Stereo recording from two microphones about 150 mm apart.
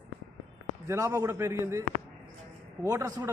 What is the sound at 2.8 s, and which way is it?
Speech, 20° right (ahead or behind).